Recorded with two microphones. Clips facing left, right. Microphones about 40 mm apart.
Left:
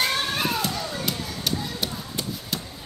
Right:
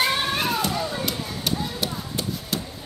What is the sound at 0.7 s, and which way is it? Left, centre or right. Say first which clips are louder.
Basketball bounce: right 2 dB; centre.